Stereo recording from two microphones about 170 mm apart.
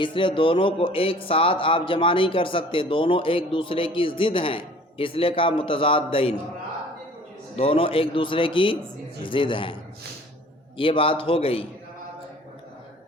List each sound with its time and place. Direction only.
0.0 s speech: 30° left (ahead or behind)
7.5 s speech: 35° left (ahead or behind)
10.8 s speech: 30° left (ahead or behind)